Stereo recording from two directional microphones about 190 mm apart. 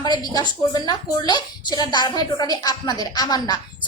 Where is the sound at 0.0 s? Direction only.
20° left (ahead or behind).